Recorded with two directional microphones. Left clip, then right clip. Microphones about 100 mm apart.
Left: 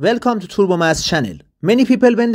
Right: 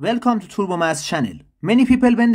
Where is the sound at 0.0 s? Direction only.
45° left (ahead or behind).